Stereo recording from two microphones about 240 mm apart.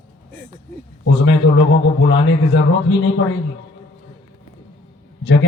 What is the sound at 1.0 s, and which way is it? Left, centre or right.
A man's voice, left.